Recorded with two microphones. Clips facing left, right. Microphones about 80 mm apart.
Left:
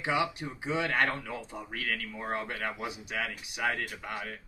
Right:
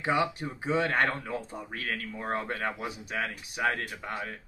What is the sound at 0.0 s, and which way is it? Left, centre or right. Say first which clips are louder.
Speech: right 2 dB; right.